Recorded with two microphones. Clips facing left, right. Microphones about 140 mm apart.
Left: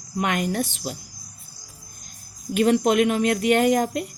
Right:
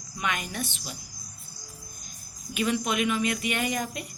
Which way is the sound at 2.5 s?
65° left (ahead or behind).